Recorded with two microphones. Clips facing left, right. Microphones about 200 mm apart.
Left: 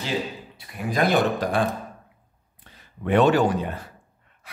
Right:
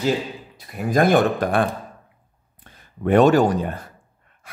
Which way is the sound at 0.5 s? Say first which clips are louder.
Right 6 dB; 45° right (ahead or behind).